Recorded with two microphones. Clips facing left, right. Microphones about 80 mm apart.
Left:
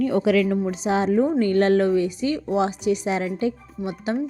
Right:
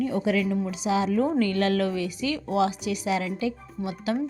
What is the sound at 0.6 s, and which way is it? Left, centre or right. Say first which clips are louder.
A woman's voice: left 4 dB; left.